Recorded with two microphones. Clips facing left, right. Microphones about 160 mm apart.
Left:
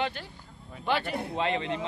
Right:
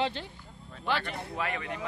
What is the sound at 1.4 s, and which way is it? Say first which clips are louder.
Speech: left 5 dB; 25° left (ahead or behind).